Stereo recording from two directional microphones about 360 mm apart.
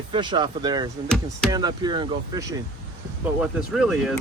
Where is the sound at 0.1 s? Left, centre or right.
Centre.